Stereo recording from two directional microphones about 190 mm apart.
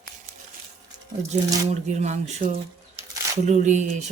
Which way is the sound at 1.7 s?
35° right (ahead or behind).